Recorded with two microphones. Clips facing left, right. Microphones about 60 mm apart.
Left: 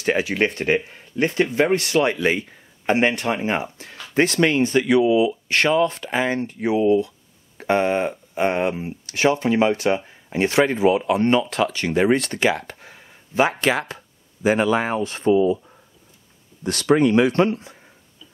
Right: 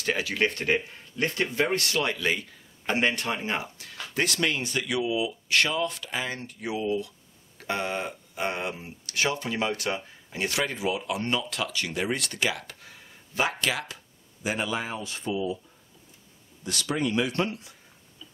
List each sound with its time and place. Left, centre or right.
0.0 s speech: left
16.6 s speech: left